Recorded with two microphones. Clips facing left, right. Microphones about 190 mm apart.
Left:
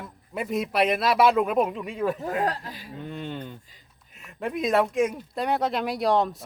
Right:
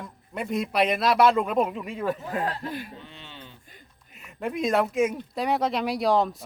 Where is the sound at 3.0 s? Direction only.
50° left (ahead or behind).